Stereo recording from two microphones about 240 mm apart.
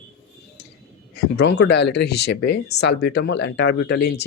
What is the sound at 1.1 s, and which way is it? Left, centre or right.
Speech, left.